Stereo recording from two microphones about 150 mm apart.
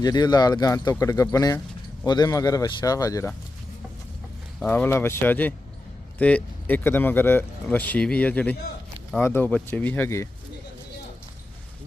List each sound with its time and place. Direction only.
0.0 s speech: 25° left (ahead or behind)
4.7 s speech: 15° left (ahead or behind)